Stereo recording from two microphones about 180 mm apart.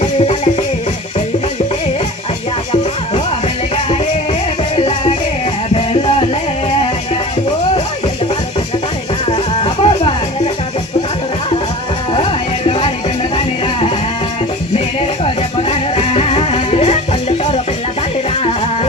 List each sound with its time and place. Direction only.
0.0 s music: 40° left (ahead or behind)
4.8 s music: 35° left (ahead or behind)
9.3 s music: 30° left (ahead or behind)
12.1 s music: 30° left (ahead or behind)
15.7 s music: 35° left (ahead or behind)